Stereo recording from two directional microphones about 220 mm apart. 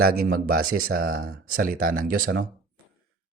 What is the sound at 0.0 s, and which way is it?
A man's voice, 45° right (ahead or behind).